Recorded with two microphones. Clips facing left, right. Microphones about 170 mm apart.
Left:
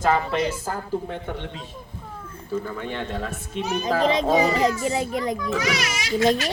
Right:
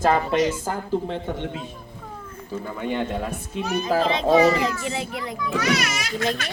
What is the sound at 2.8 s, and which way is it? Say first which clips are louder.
Speech: right 3 dB; 10° right (ahead or behind).